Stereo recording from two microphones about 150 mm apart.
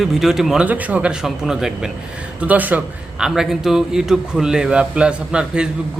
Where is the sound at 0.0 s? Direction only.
Centre (ahead or behind).